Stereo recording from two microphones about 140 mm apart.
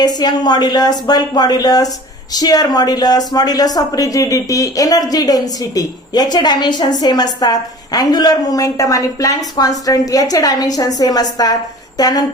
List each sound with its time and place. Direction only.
0.0 s a woman's voice: 30° left (ahead or behind)